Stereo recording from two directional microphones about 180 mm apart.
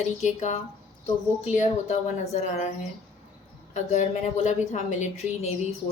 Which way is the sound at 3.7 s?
40° left (ahead or behind).